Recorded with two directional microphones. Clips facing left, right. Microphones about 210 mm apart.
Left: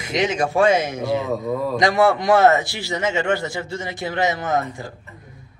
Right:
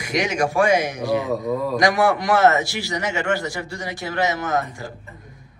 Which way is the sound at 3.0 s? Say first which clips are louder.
Left 3 dB; 20° left (ahead or behind).